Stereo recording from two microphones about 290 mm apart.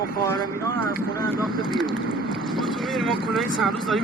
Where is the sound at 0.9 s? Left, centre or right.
Right.